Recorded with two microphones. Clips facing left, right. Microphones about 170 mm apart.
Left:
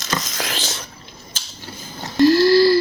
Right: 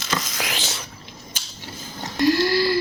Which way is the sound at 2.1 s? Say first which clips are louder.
Left 7 dB; 35° left (ahead or behind).